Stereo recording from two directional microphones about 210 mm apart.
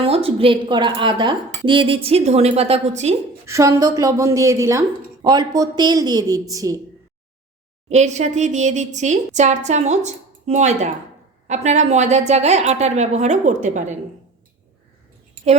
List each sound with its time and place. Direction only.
0.0 s speech: 25° right (ahead or behind)
3.4 s a woman's voice: 15° right (ahead or behind)
7.9 s a woman's voice: 35° right (ahead or behind)